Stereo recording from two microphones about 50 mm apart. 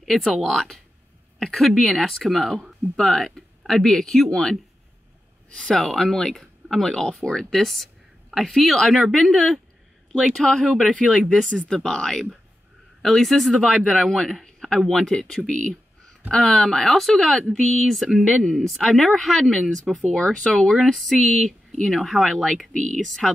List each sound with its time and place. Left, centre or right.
0.0 s speech: centre
11.6 s speech: centre
15.1 s speech: centre
17.2 s speech: centre
17.5 s speech: centre
18.2 s speech: centre
20.7 s speech: centre